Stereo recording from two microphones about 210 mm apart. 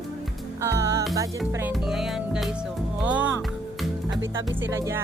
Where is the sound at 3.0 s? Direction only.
5° right (ahead or behind).